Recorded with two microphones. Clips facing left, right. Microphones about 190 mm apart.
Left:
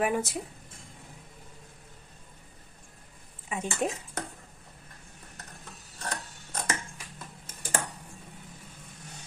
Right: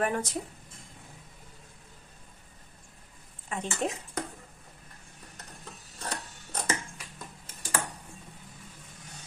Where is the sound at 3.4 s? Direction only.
5° left (ahead or behind).